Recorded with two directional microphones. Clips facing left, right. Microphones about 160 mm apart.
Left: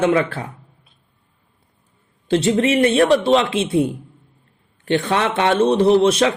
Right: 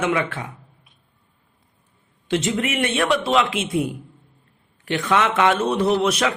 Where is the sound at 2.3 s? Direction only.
35° left (ahead or behind).